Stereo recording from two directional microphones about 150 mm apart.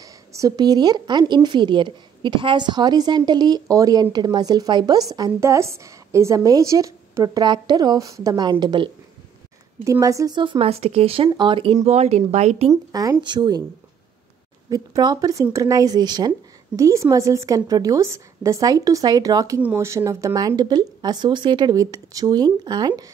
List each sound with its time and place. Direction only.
0.0 s a woman's voice: 20° right (ahead or behind)
9.8 s speech: 20° right (ahead or behind); by 12.7 s 45° right (ahead or behind)
12.9 s a woman's voice: 25° right (ahead or behind)
14.7 s a woman's voice: 25° right (ahead or behind)